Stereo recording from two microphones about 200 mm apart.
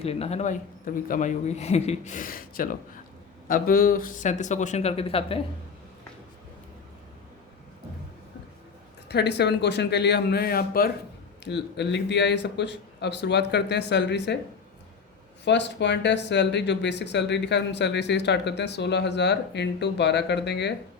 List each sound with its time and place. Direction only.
0.0 s a man's voice: 30° left (ahead or behind)
9.0 s speech: 55° left (ahead or behind)
11.4 s speech: 60° left (ahead or behind)
15.4 s speech: 60° left (ahead or behind)